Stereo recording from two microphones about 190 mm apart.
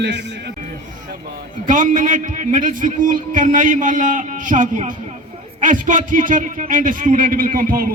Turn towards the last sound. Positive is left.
turn(degrees=-50)  # may be behind; listen again after turning